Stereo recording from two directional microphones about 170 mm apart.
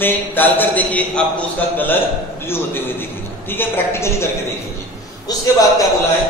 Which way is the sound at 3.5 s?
10° left (ahead or behind).